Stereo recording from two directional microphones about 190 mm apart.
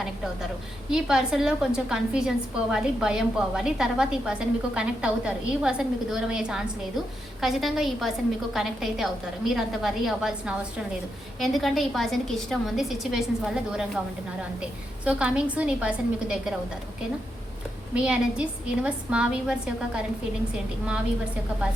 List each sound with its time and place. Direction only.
0.9 s a woman's voice: 5° right (ahead or behind)
17.9 s a woman's voice: 5° right (ahead or behind)